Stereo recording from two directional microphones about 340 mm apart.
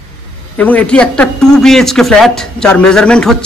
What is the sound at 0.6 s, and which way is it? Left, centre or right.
Speech, centre.